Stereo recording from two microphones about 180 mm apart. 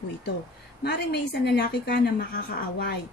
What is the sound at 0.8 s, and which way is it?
A woman's voice, 65° left (ahead or behind).